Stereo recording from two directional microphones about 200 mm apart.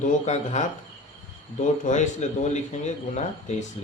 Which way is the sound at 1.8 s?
35° left (ahead or behind).